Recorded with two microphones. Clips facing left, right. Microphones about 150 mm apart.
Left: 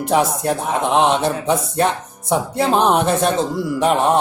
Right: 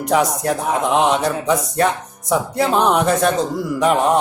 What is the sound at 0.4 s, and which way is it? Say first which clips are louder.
Speech: even; 25° left (ahead or behind).